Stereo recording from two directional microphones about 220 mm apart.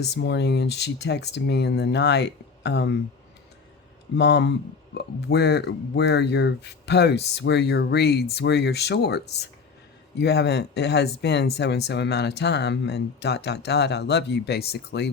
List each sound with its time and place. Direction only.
0.0 s speech: 50° left (ahead or behind)
4.2 s speech: 50° left (ahead or behind)